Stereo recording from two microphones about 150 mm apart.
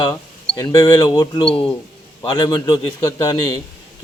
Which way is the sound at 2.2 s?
25° left (ahead or behind).